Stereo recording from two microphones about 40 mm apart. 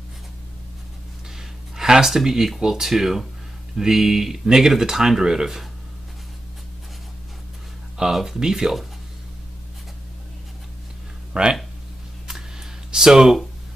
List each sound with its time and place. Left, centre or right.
1.8 s speech: centre
8.0 s speech: centre
11.3 s speech: right
12.9 s speech: centre